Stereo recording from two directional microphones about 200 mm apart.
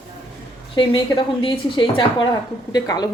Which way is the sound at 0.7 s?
25° left (ahead or behind).